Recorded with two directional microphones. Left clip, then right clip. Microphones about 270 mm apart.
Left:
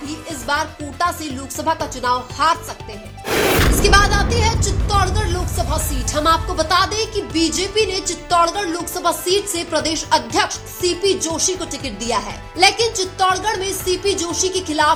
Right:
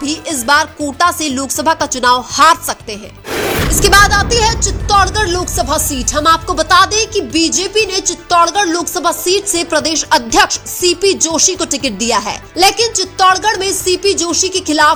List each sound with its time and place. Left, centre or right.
0.0 s a woman's voice: right
3.2 s music: centre
3.8 s a woman's voice: right